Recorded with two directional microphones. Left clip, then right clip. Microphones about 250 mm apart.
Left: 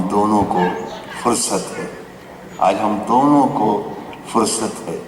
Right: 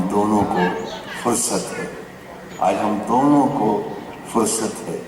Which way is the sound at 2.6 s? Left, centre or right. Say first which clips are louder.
Left 3 dB; centre.